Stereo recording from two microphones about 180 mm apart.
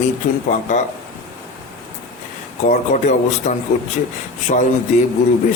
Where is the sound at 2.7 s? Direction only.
40° left (ahead or behind).